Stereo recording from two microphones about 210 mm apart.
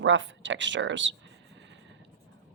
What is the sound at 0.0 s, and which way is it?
A woman's voice, 60° right (ahead or behind).